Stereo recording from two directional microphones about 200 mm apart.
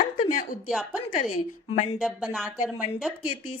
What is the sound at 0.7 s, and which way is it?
Speech, centre (ahead or behind).